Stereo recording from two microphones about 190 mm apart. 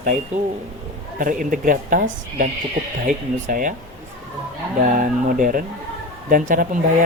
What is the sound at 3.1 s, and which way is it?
Speech, 45° right (ahead or behind).